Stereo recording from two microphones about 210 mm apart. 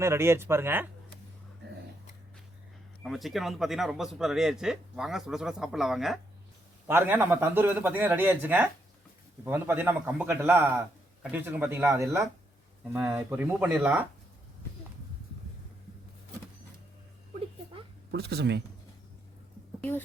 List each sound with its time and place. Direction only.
0.0 s a man's voice: 10° right (ahead or behind)
3.0 s a man's voice: centre (ahead or behind)
18.1 s speech: 50° right (ahead or behind)